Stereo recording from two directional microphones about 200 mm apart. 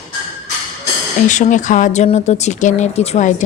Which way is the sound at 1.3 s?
35° left (ahead or behind).